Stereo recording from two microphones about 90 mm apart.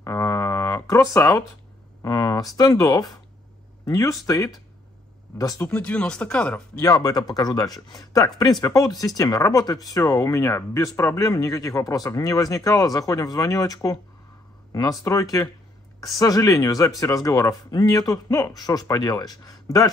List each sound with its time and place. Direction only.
0.0 s a sound: 30° left (ahead or behind)
2.0 s speech: 45° left (ahead or behind)
5.7 s speech: 15° left (ahead or behind)
6.8 s speech: 40° left (ahead or behind)